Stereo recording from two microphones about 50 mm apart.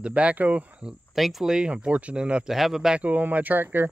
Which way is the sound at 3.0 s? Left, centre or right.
Right.